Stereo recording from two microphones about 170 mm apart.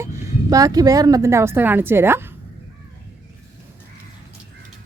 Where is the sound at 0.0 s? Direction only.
15° right (ahead or behind).